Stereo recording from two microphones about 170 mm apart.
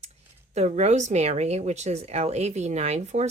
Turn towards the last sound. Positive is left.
turn(degrees=-40)  # may be behind; listen again after turning